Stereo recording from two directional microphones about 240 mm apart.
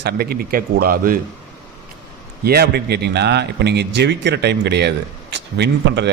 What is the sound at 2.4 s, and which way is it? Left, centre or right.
A man's voice, right.